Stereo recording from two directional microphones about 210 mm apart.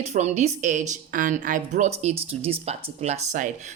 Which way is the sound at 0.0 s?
30° right (ahead or behind).